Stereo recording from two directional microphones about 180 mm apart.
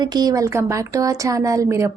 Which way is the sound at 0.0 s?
20° right (ahead or behind).